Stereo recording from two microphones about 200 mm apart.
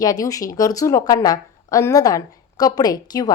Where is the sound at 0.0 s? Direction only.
15° left (ahead or behind).